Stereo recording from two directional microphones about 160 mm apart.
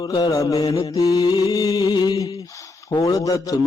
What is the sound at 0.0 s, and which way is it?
Mantra, 25° left (ahead or behind).